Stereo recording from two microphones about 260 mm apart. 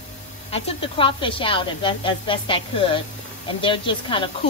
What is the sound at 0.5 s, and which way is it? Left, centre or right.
Speech, left.